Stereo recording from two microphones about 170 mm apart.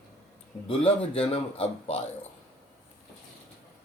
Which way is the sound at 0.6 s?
35° left (ahead or behind).